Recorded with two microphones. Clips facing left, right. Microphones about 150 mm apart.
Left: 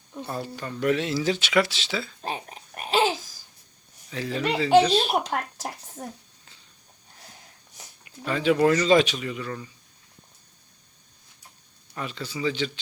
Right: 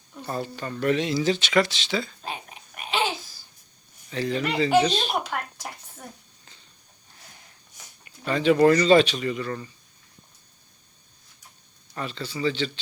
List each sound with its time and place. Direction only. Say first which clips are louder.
0.3 s speech: right 3 dB; 5° left (ahead or behind)
2.2 s babbling: left 3 dB; 35° left (ahead or behind)
4.1 s speech: right 1 dB; 5° left (ahead or behind)
5.2 s speech: left 3 dB; 35° left (ahead or behind)
8.0 s speech: right 2 dB; 5° left (ahead or behind)
11.9 s speech: right 1 dB; 5° left (ahead or behind)